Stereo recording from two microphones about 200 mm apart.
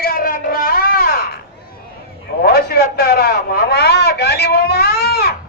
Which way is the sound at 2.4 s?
50° left (ahead or behind).